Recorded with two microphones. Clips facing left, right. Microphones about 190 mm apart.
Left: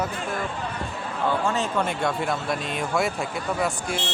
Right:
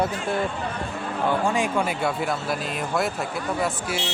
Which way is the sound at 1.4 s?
10° right (ahead or behind).